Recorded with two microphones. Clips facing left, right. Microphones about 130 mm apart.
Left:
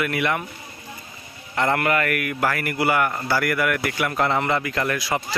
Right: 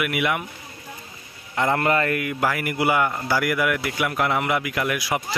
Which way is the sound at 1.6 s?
15° right (ahead or behind).